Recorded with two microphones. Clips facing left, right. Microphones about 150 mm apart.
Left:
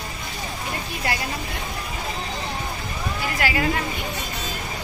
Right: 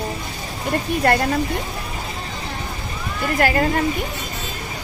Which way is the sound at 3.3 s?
45° right (ahead or behind).